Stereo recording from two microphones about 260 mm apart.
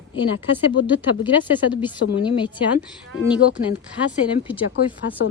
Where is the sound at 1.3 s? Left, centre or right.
Centre.